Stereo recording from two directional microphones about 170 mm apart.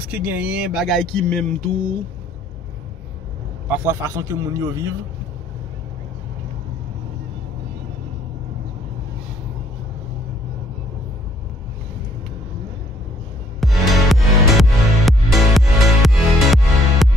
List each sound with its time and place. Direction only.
0.1 s speech: 10° right (ahead or behind)
3.6 s a man's voice: 10° right (ahead or behind)
13.6 s music: centre (ahead or behind)